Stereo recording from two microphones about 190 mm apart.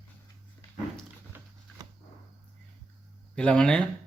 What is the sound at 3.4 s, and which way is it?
Speech, 5° left (ahead or behind).